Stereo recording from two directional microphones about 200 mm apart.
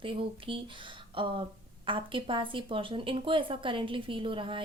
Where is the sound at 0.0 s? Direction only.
25° right (ahead or behind).